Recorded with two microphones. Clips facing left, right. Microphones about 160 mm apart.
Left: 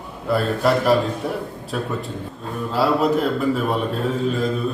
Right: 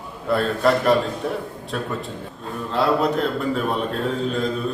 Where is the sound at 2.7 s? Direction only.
5° left (ahead or behind).